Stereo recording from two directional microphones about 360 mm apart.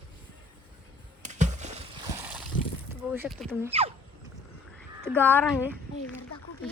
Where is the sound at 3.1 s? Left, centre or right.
Centre.